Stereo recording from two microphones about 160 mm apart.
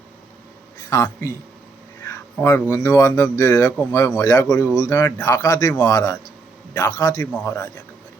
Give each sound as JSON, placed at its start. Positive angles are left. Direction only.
{"t": 0.9, "sound": "speech", "side_deg": 20}